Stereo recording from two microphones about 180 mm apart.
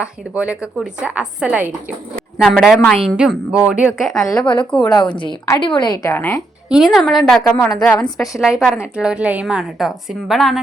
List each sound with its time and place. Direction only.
0.0 s a woman's voice: 5° right (ahead or behind)
4.9 s a woman's voice: 25° left (ahead or behind)
6.7 s a woman's voice: centre (ahead or behind)